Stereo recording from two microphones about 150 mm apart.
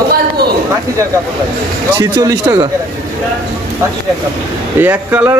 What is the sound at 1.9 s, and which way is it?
Speech, 25° right (ahead or behind).